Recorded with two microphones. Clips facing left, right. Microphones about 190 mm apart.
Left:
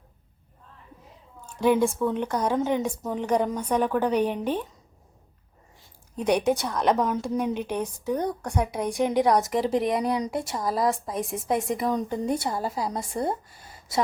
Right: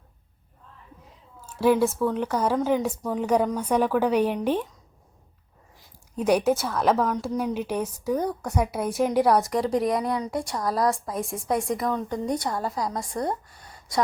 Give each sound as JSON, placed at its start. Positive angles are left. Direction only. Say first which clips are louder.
{"t": 1.5, "sound": "a woman's voice", "louder": "right 1 dB", "side_deg": -5}
{"t": 6.1, "sound": "a woman's voice", "louder": "right 1 dB", "side_deg": -5}
{"t": 12.9, "sound": "speech", "louder": "even", "side_deg": 25}
{"t": 13.7, "sound": "gasp", "louder": "even", "side_deg": 5}